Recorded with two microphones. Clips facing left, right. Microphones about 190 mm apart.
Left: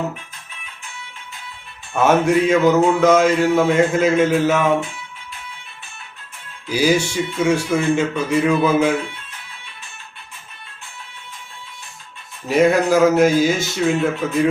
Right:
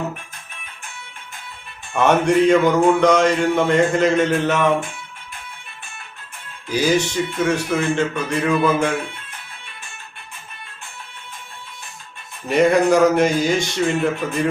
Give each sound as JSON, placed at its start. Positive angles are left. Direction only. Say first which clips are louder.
{"t": 1.9, "sound": "mantra", "louder": "left 1 dB", "side_deg": 5}
{"t": 6.7, "sound": "speech", "louder": "left 1 dB", "side_deg": 10}
{"t": 12.5, "sound": "mantra", "louder": "even", "side_deg": 0}